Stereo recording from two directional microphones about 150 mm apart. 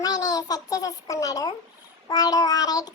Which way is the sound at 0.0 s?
25° left (ahead or behind).